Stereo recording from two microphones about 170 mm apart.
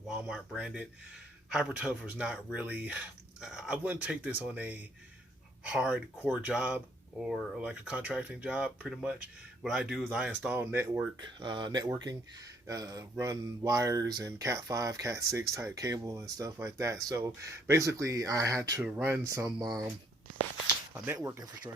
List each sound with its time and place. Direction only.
0.1 s speech: 5° right (ahead or behind)
11.2 s speech: 25° right (ahead or behind)
18.8 s speech: 5° right (ahead or behind)
19.0 s speech: 15° right (ahead or behind)
20.9 s speech: 10° right (ahead or behind)